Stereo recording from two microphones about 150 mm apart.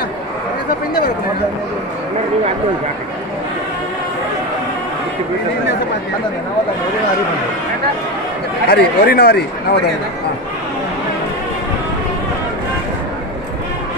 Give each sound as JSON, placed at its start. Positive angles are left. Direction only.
{"t": 8.6, "sound": "speech", "side_deg": 90}